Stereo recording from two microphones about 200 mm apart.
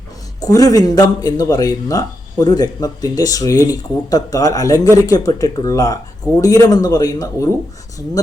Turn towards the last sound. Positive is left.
turn(degrees=20)  # may be behind; listen again after turning